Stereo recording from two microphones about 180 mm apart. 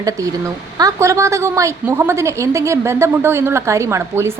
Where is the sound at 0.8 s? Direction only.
20° right (ahead or behind).